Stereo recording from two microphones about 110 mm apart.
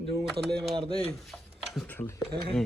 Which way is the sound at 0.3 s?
Centre (ahead or behind).